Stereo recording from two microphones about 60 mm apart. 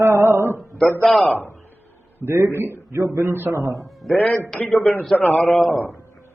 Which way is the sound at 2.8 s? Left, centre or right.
Right.